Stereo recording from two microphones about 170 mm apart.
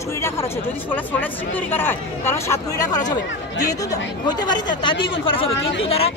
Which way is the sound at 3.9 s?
25° left (ahead or behind).